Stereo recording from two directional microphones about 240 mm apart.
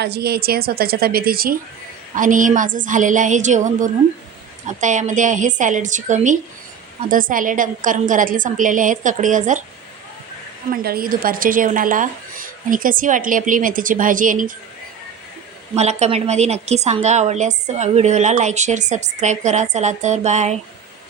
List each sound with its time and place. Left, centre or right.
0.0 s a woman's voice: right
10.7 s a woman's voice: right
15.7 s a woman's voice: right